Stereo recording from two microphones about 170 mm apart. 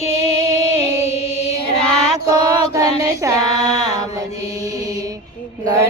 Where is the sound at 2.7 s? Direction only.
20° right (ahead or behind).